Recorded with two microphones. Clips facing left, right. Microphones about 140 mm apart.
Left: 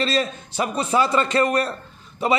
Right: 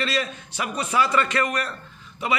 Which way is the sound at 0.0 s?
30° left (ahead or behind).